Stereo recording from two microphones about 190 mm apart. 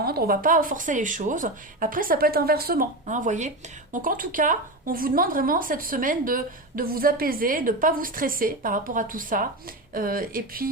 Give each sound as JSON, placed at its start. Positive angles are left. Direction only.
{"t": 0.0, "sound": "a woman's voice", "side_deg": -50}